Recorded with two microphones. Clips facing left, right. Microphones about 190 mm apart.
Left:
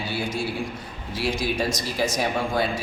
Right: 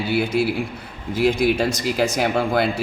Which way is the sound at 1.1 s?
55° right (ahead or behind).